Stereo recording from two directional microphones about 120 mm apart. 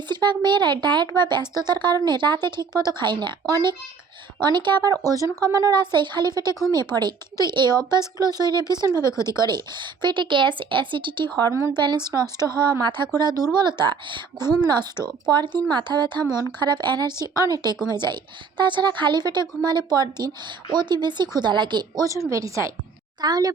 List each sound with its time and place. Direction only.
0.1 s a woman's voice: 40° right (ahead or behind)
9.0 s speech: 25° left (ahead or behind)
9.4 s a woman's voice: 40° right (ahead or behind)